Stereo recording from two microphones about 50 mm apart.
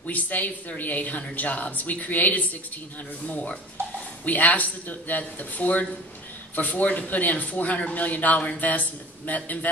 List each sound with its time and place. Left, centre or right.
0.0 s a man's voice: left